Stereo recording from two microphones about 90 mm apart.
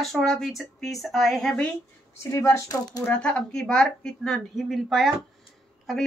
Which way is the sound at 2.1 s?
30° left (ahead or behind).